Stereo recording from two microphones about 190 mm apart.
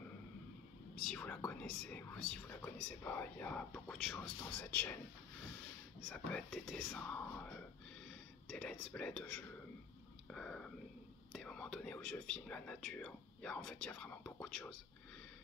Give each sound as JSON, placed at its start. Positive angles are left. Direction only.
{"t": 0.9, "sound": "speech", "side_deg": 5}
{"t": 6.0, "sound": "speech", "side_deg": 5}
{"t": 8.5, "sound": "speech", "side_deg": 5}
{"t": 10.3, "sound": "whispering", "side_deg": 5}
{"t": 11.3, "sound": "speech", "side_deg": 5}